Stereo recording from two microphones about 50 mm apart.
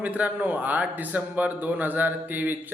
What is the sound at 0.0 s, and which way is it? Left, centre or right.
A man's voice, right.